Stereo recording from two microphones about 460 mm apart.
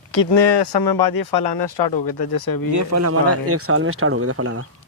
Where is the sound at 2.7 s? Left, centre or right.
Right.